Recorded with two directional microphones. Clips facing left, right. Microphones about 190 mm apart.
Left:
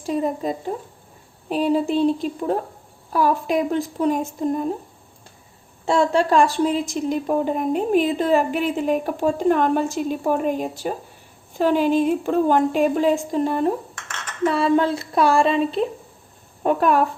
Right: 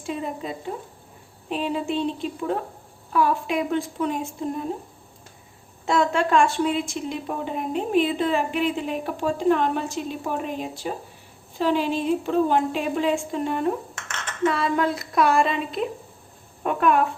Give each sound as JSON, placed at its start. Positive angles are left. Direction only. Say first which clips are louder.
{"t": 0.0, "sound": "speech", "louder": "left 7 dB", "side_deg": 40}
{"t": 5.8, "sound": "a woman's voice", "louder": "left 3 dB", "side_deg": 30}